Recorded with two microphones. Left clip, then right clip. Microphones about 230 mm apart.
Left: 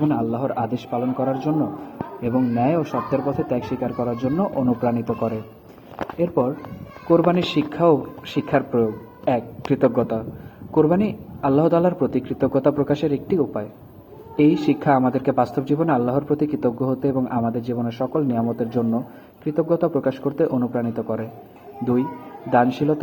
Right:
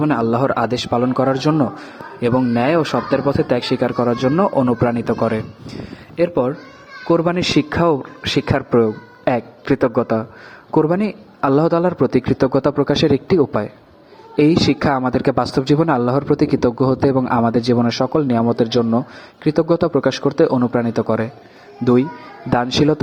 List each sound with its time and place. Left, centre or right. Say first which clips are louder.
0.1 s speech: right 6 dB; right
7.1 s speech: right 2 dB; right
22.5 s speech: right 2 dB; right